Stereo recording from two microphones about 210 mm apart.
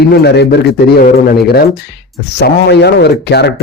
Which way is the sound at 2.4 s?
50° left (ahead or behind).